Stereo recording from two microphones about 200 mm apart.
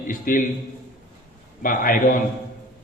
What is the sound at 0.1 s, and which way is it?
Speech, 40° left (ahead or behind).